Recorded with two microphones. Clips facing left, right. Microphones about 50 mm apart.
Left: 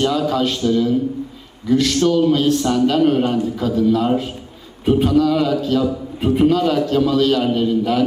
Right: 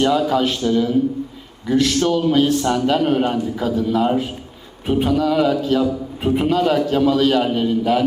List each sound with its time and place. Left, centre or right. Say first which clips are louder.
0.0 s a man's voice: right 1 dB; centre
2.0 s a man's voice: left 1 dB; centre